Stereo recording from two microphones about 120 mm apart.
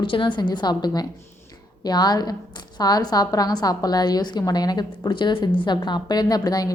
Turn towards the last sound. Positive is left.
turn(degrees=35)  # may be behind; listen again after turning